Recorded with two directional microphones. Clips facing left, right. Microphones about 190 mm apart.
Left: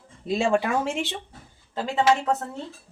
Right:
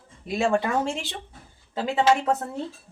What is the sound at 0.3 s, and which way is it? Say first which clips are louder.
Speech: left 1 dB; 15° left (ahead or behind).